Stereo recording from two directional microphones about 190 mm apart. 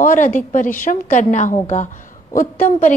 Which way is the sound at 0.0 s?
40° left (ahead or behind).